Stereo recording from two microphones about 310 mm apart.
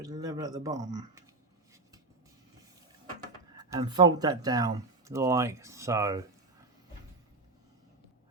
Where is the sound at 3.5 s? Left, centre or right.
Centre.